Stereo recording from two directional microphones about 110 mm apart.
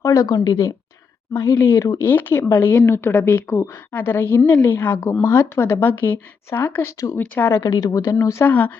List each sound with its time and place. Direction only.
0.0 s a woman's voice: 30° left (ahead or behind)
1.3 s a woman's voice: 20° left (ahead or behind)
8.4 s speech: 15° left (ahead or behind)